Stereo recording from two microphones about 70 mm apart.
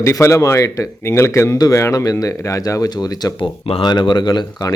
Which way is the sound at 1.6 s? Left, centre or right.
Left.